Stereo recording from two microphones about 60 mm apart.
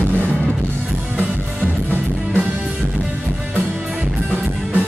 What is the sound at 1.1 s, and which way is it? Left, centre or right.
Music, right.